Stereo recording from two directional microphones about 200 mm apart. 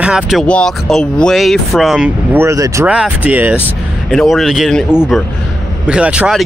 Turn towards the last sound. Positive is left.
turn(degrees=-5)  # may be behind; listen again after turning